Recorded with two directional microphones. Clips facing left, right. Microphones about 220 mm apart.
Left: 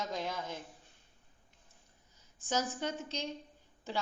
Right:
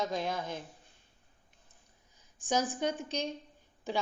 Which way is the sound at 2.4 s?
15° right (ahead or behind).